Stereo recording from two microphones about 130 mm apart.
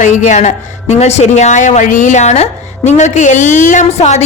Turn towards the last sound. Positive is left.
turn(degrees=55)  # may be behind; listen again after turning